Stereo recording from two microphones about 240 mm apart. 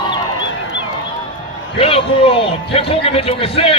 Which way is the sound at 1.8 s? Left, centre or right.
Left.